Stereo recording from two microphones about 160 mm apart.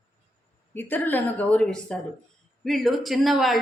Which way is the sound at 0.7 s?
10° left (ahead or behind).